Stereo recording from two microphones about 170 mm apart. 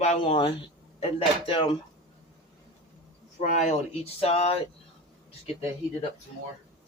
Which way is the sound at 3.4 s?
50° left (ahead or behind).